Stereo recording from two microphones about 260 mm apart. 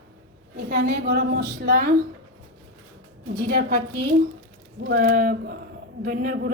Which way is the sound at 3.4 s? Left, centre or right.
Right.